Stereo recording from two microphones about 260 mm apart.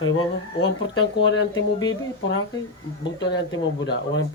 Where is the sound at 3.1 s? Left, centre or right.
Left.